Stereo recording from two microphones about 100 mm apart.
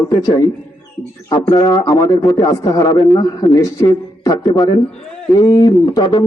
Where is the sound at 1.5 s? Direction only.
40° left (ahead or behind).